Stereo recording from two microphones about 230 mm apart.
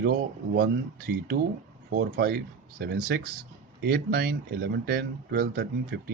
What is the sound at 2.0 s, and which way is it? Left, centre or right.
Speech, right.